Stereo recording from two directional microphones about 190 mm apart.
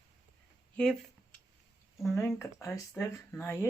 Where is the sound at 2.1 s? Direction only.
15° left (ahead or behind).